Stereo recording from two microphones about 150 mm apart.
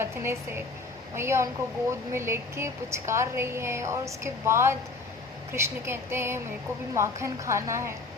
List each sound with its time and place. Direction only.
0.0 s a woman's voice: 15° right (ahead or behind)